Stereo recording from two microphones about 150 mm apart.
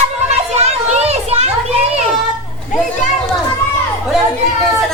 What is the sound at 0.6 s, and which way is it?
Children playing, 45° right (ahead or behind).